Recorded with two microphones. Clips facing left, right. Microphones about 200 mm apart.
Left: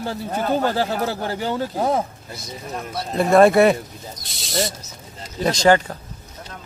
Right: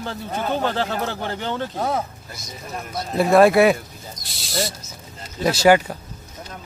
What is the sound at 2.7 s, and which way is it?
Speech, 5° right (ahead or behind).